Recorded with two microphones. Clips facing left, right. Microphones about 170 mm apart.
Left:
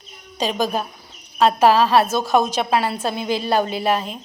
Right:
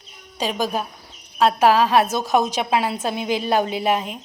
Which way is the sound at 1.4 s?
10° right (ahead or behind).